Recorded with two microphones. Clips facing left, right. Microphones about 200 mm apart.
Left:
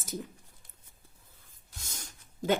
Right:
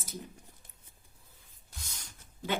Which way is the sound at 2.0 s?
45° left (ahead or behind).